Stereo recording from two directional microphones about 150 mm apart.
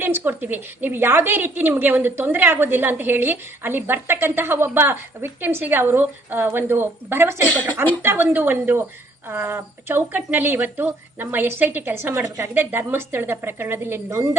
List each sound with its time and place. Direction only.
0.0 s a woman's voice: 15° right (ahead or behind)
7.4 s speech: 10° left (ahead or behind)
8.0 s a woman's voice: 15° right (ahead or behind)